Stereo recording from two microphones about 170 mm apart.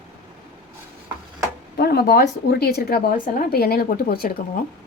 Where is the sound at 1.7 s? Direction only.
65° left (ahead or behind).